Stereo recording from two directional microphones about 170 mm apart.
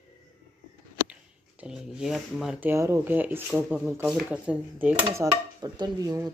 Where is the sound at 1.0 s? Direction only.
5° right (ahead or behind).